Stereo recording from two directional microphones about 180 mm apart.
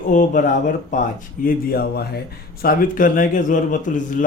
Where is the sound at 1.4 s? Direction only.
60° left (ahead or behind).